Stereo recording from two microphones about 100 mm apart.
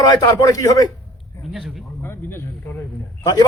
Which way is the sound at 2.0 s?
25° left (ahead or behind).